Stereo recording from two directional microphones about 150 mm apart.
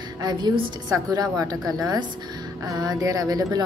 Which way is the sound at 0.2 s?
25° right (ahead or behind).